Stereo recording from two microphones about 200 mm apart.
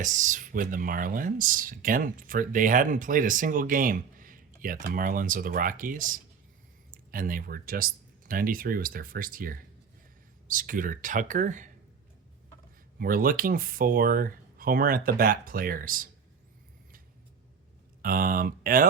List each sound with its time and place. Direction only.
0.0 s speech: 40° right (ahead or behind)
13.0 s speech: 45° right (ahead or behind)
18.0 s speech: 45° right (ahead or behind)